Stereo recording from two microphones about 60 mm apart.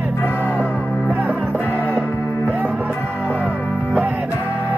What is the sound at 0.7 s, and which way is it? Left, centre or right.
Music, right.